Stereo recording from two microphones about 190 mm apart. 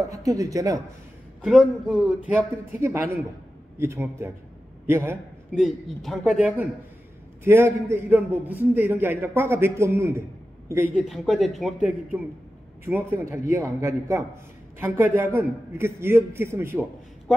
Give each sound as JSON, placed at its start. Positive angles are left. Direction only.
{"t": 0.0, "sound": "a man's voice", "side_deg": -15}
{"t": 1.4, "sound": "a man's voice", "side_deg": 0}
{"t": 5.6, "sound": "a man's voice", "side_deg": 0}
{"t": 11.1, "sound": "a man's voice", "side_deg": 0}
{"t": 12.8, "sound": "a man's voice", "side_deg": -15}